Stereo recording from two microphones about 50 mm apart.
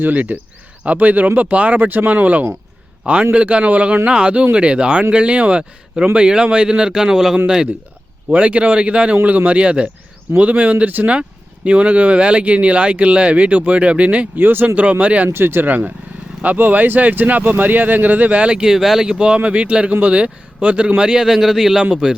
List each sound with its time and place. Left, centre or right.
0.0 s speech: right
3.0 s a man's voice: right
14.3 s speech: right
14.8 s speech: right
15.3 s speech: right; by 21.8 s centre